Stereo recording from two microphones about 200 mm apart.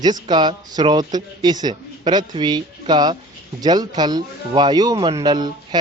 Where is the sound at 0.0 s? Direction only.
20° right (ahead or behind).